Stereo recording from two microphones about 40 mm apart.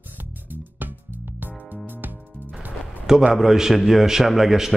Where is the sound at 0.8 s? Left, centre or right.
Right.